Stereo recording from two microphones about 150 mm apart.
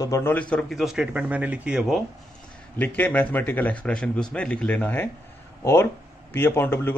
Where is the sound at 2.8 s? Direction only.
10° left (ahead or behind).